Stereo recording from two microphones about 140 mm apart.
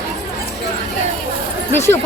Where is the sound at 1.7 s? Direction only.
15° left (ahead or behind).